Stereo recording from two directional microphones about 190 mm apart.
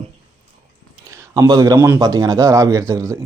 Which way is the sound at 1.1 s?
20° right (ahead or behind).